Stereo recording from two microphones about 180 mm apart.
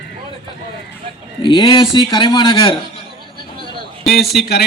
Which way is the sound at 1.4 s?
30° left (ahead or behind).